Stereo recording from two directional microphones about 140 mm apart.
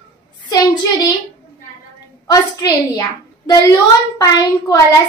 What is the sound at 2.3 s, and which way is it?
A woman's voice, 25° left (ahead or behind).